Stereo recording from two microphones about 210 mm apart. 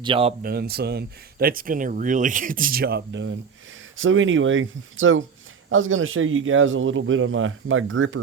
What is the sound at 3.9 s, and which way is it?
A man's voice, 70° right (ahead or behind).